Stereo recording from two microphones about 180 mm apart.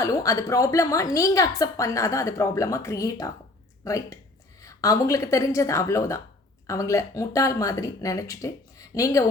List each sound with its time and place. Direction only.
0.0 s a woman's voice: 20° left (ahead or behind)